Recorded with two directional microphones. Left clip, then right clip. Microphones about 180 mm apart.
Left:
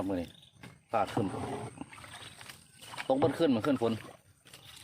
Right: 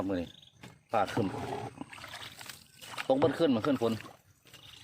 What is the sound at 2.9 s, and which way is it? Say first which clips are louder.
Rowboat: right 2 dB; 20° right (ahead or behind).